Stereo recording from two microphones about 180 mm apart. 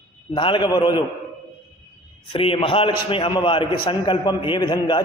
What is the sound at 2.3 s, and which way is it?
A man's voice, 30° left (ahead or behind).